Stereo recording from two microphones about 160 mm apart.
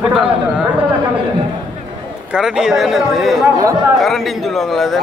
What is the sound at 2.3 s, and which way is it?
A man's voice, 5° right (ahead or behind).